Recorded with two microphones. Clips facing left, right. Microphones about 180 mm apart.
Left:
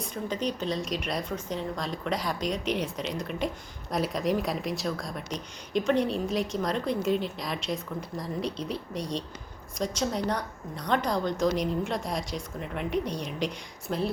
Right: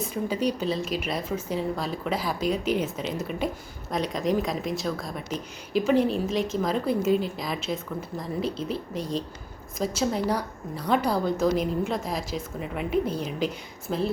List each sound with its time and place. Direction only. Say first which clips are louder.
0.0 s a woman's voice: right 4 dB; 5° right (ahead or behind)